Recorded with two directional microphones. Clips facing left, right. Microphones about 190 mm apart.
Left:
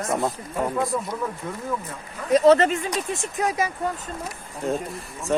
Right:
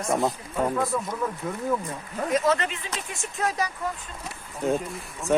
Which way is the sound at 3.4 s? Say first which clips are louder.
Left 2 dB; 20° left (ahead or behind).